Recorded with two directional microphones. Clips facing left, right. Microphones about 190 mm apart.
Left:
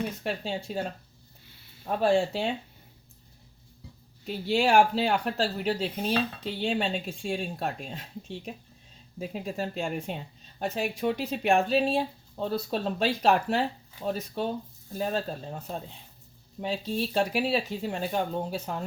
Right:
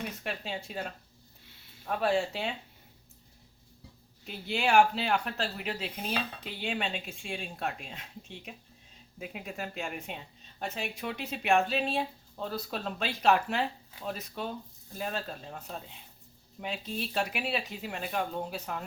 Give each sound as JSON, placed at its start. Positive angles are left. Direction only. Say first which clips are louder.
{"t": 0.2, "sound": "speech", "louder": "left 5 dB", "side_deg": 30}
{"t": 4.3, "sound": "speech", "louder": "left 5 dB", "side_deg": 35}